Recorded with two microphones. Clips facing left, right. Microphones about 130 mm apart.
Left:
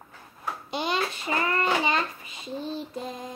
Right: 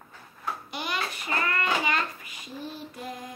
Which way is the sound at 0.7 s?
25° left (ahead or behind).